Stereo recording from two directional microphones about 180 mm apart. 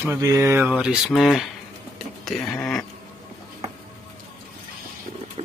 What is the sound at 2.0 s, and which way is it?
Whispering, centre (ahead or behind).